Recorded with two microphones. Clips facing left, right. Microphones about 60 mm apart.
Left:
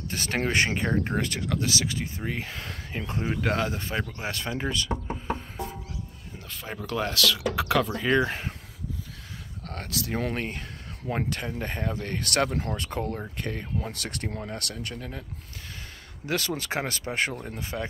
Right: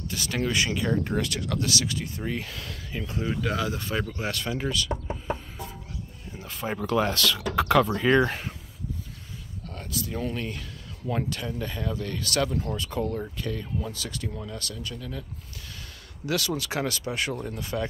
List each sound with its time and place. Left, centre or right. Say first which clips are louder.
0.1 s speech: left 1 dB; left
1.1 s speech: even; left
3.6 s speech: right 1 dB; left
6.5 s speech: right 6 dB; centre
7.5 s a sound: right 8 dB; centre
7.9 s speech: right 3 dB; centre
9.7 s speech: left 2 dB; left
10.3 s speech: left 1 dB; left
13.0 s speech: right 2 dB; left
13.9 s speech: left 1 dB; left
15.0 s speech: right 1 dB; left
16.3 s speech: right 1 dB; left